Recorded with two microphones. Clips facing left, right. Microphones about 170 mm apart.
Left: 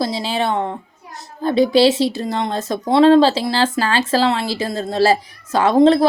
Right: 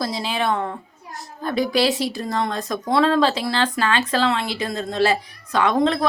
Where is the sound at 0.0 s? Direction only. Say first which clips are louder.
Left 3 dB; 30° left (ahead or behind).